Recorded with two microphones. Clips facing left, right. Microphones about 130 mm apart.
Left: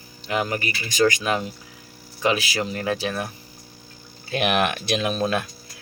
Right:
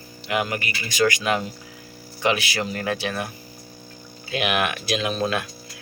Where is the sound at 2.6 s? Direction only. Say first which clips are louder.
Left 1 dB; 25° left (ahead or behind).